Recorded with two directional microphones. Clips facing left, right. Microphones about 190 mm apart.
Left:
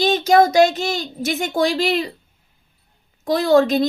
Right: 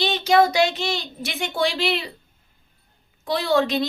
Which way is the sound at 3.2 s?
45° left (ahead or behind).